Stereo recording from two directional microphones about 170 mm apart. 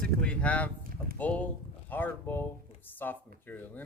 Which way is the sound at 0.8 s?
55° right (ahead or behind).